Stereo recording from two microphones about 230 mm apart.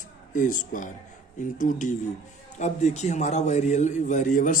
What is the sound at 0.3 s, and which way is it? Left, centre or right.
A man's voice, left.